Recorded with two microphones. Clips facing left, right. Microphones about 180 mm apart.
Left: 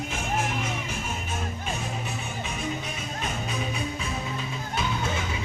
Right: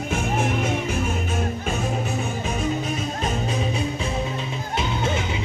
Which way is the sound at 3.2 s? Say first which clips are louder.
Right 4 dB; 35° right (ahead or behind).